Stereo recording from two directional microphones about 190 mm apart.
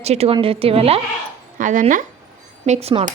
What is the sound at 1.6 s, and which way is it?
A woman's voice, 45° right (ahead or behind).